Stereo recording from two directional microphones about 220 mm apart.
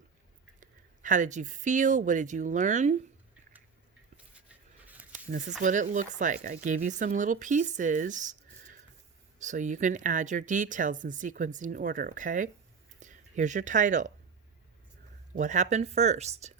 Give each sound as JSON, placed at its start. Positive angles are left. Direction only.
{"t": 0.6, "sound": "speech", "side_deg": -35}
{"t": 4.9, "sound": "a sound", "side_deg": -5}
{"t": 5.6, "sound": "speech", "side_deg": -35}
{"t": 9.4, "sound": "speech", "side_deg": -35}
{"t": 15.4, "sound": "speech", "side_deg": -35}